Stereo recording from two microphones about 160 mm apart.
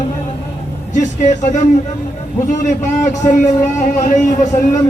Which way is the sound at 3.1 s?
50° left (ahead or behind).